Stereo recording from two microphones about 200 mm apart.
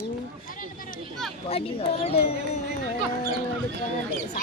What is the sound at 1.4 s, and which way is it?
Speech, 30° left (ahead or behind).